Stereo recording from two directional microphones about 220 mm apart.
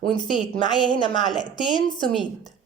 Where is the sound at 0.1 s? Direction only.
20° left (ahead or behind).